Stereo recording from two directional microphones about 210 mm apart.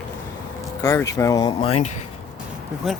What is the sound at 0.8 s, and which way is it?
Speech, 15° left (ahead or behind).